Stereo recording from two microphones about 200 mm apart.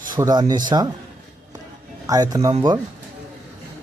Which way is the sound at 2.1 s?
20° right (ahead or behind).